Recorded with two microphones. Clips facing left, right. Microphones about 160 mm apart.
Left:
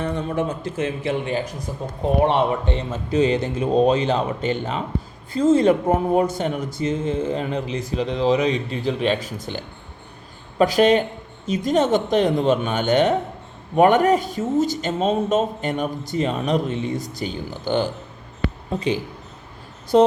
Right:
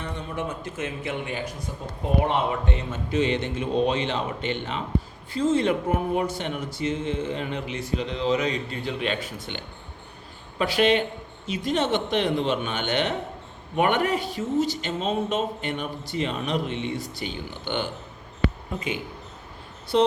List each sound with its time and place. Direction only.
0.0 s speech: 45° left (ahead or behind)
19.9 s speech: 45° left (ahead or behind)